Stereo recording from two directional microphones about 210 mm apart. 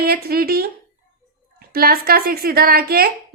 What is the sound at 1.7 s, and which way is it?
Speech, 45° right (ahead or behind).